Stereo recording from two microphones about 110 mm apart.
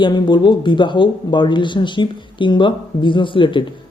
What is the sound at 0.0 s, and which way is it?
A man's voice, 45° left (ahead or behind).